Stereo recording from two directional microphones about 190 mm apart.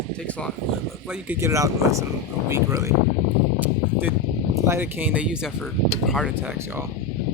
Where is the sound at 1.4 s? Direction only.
15° right (ahead or behind).